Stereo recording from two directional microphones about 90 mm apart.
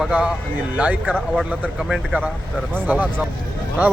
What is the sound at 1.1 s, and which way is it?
Speech, centre (ahead or behind).